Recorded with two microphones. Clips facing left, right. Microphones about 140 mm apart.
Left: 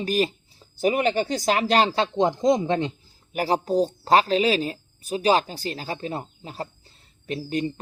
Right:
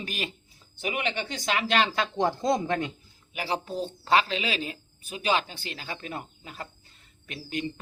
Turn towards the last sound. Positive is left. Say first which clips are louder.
# left 7 dB
turn(degrees=35)  # may be behind; listen again after turning